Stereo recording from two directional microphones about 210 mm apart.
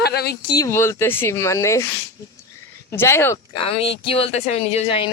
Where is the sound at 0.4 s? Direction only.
20° left (ahead or behind).